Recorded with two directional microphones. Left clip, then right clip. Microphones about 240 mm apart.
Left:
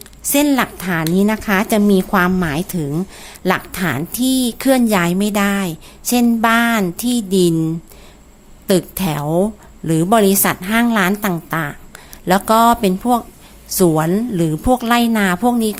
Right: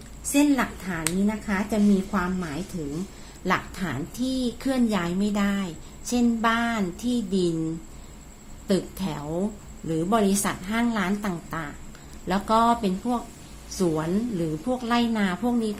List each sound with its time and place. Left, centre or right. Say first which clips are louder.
0.2 s a woman's voice: left 7 dB; left
8.6 s a woman's voice: left 10 dB; left